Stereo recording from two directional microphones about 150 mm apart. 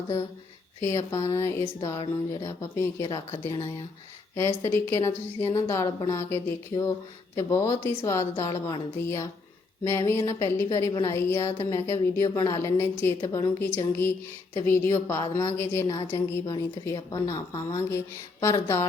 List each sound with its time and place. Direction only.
0.8 s a woman's voice: 20° left (ahead or behind)
13.2 s a woman's voice: 30° left (ahead or behind)
13.6 s a woman's voice: 15° left (ahead or behind)
16.9 s a woman's voice: 25° left (ahead or behind)